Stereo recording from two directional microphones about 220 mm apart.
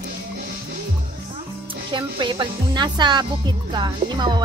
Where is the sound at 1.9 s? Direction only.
20° right (ahead or behind).